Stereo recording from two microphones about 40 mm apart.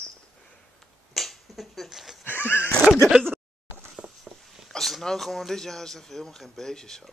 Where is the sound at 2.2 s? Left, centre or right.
Left.